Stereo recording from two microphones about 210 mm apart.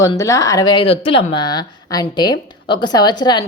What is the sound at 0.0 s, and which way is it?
A woman's voice, 15° left (ahead or behind).